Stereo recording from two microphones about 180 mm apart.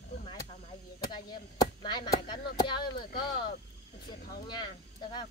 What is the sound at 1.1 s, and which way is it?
Chop, 25° left (ahead or behind).